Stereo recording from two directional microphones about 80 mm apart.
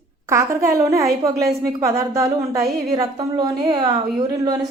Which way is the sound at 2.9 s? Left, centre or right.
Right.